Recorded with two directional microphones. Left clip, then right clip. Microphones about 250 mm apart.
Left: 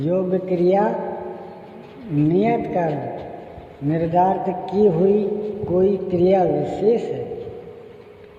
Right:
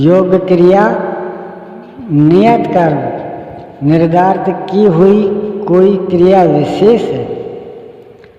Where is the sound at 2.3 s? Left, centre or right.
Right.